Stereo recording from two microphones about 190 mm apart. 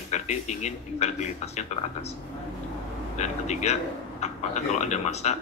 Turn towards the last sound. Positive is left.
turn(degrees=35)  # may be behind; listen again after turning